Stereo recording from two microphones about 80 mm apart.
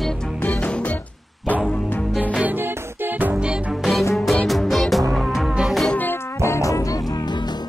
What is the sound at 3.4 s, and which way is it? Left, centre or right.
Music, centre.